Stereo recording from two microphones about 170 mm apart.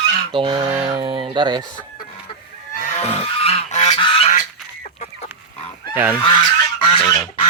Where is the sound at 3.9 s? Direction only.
30° left (ahead or behind).